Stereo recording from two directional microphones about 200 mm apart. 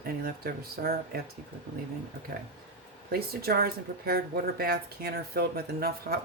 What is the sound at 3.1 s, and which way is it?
Speech, 50° right (ahead or behind).